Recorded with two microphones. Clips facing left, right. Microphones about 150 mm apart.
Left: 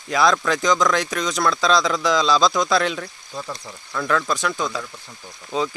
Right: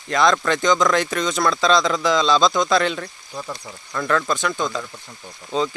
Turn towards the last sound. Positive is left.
turn(degrees=0)  # may be behind; listen again after turning